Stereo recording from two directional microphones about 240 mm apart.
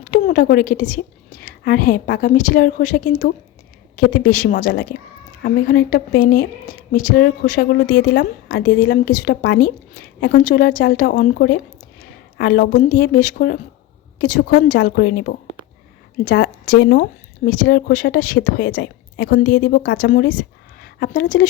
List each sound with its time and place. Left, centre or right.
0.0 s a woman's voice: left